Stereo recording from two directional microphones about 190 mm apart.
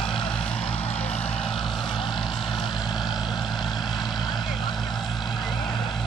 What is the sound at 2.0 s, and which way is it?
Vehicle, 25° left (ahead or behind).